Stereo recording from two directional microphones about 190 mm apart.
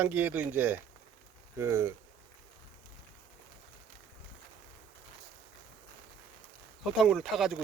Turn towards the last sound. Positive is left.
turn(degrees=0)  # may be behind; listen again after turning